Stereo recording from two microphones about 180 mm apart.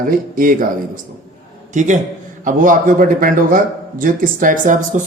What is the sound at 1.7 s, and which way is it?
A man's voice, 45° right (ahead or behind).